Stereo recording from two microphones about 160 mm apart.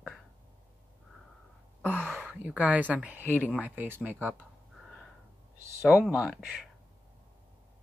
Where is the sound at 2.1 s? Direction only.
5° right (ahead or behind).